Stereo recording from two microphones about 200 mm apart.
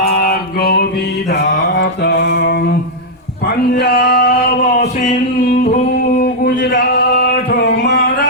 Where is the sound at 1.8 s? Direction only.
60° left (ahead or behind).